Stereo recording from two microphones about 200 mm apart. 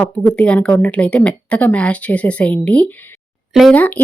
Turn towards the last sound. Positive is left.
turn(degrees=10)  # may be behind; listen again after turning